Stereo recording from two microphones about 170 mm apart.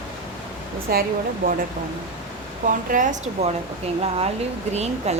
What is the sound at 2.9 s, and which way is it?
Speech, 50° right (ahead or behind).